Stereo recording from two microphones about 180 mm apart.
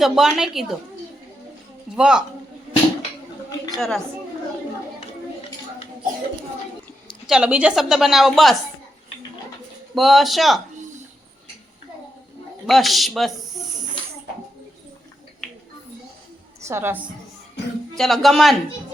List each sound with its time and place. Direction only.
0.0 s a woman's voice: 5° right (ahead or behind)
2.0 s a woman's voice: 5° right (ahead or behind)
3.8 s a woman's voice: centre (ahead or behind)
7.3 s a woman's voice: 5° right (ahead or behind)
9.9 s a woman's voice: centre (ahead or behind)
12.6 s speech: centre (ahead or behind)
16.6 s a woman's voice: 15° right (ahead or behind)
17.6 s music: 75° left (ahead or behind)
17.9 s a woman's voice: centre (ahead or behind)